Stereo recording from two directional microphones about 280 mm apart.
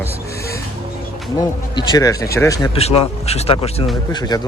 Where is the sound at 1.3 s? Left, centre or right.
Centre.